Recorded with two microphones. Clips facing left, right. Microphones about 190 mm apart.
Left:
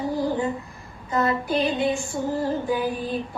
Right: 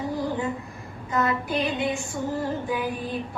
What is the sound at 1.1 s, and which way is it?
Female singing, 35° left (ahead or behind).